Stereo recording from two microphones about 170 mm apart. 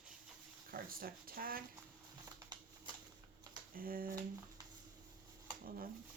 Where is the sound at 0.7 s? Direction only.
60° right (ahead or behind).